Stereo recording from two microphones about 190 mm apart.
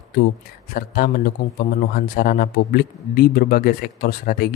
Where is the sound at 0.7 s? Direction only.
50° left (ahead or behind).